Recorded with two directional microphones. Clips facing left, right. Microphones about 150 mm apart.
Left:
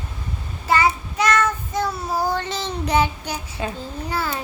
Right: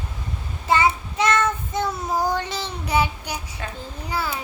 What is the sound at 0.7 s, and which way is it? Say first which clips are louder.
Child singing: even; 25° right (ahead or behind).